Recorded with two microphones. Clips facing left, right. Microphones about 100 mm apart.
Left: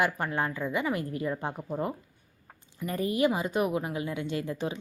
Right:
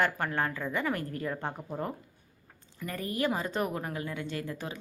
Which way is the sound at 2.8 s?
20° left (ahead or behind).